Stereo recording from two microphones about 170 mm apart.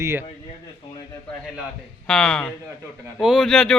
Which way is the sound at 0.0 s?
15° right (ahead or behind).